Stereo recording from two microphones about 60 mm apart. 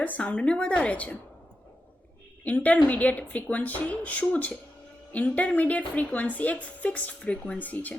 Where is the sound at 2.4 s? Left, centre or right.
Left.